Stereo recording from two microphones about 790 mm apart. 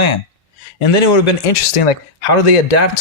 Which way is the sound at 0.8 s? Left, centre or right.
Left.